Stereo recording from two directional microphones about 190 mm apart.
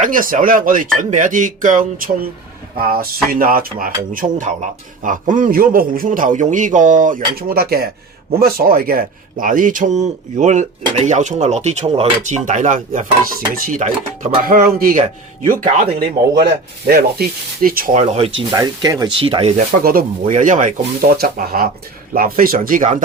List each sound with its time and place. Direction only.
0.0 s a man's voice: 45° right (ahead or behind)
16.3 s a man's voice: 55° right (ahead or behind)
18.0 s a man's voice: 30° right (ahead or behind)
18.5 s speech: 20° right (ahead or behind)
19.8 s a man's voice: 50° right (ahead or behind)
20.2 s a man's voice: 40° right (ahead or behind)